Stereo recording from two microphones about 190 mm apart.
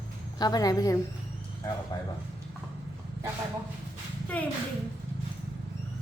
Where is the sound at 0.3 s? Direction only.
20° left (ahead or behind).